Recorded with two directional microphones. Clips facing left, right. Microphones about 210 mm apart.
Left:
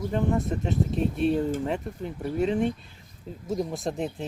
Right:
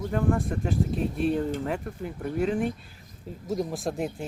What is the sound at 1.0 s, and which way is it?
Speech, centre (ahead or behind).